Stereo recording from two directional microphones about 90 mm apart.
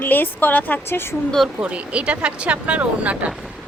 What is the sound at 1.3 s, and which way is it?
Speech, centre (ahead or behind).